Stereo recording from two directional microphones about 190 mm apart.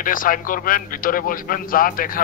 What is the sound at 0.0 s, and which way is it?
A man's voice, 45° left (ahead or behind).